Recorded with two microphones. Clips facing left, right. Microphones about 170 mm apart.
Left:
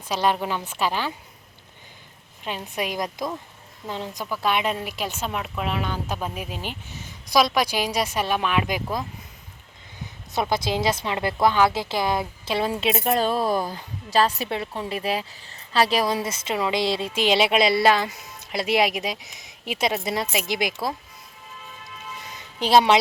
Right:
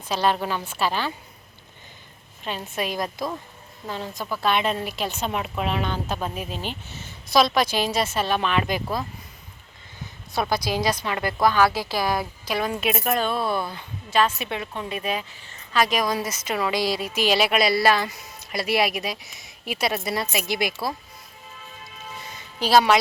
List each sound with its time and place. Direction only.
0.1 s a woman's voice: 15° left (ahead or behind)
2.4 s a woman's voice: 15° left (ahead or behind)
10.3 s a woman's voice: 20° left (ahead or behind)
22.6 s a woman's voice: 25° left (ahead or behind)